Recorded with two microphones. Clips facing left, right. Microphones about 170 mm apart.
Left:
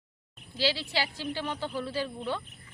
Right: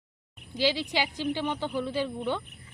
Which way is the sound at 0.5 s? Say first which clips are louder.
Right 3 dB; 15° right (ahead or behind).